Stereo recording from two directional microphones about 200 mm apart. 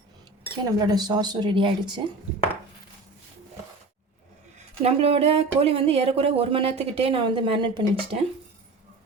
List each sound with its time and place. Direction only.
0.6 s speech: 20° right (ahead or behind)
4.8 s speech: 30° right (ahead or behind)